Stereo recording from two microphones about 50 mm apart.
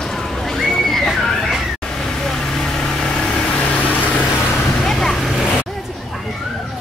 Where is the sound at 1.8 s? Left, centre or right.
Centre.